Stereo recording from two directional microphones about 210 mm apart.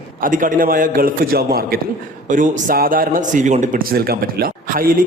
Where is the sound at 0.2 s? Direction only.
40° right (ahead or behind).